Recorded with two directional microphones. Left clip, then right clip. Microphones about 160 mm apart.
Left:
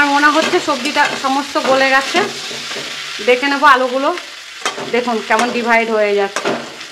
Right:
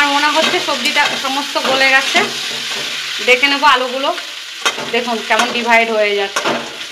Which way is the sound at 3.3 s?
35° left (ahead or behind).